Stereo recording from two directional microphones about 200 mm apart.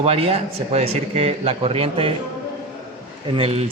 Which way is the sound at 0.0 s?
30° right (ahead or behind).